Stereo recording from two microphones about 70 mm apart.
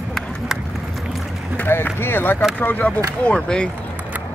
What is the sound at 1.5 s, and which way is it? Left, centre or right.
Speech, left.